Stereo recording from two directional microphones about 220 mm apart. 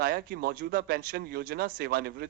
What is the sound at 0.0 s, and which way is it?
Speech, 45° right (ahead or behind).